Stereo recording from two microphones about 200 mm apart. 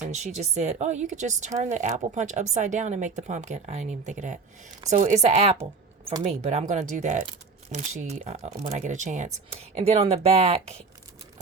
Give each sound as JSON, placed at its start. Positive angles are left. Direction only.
{"t": 0.1, "sound": "a woman's voice", "side_deg": -35}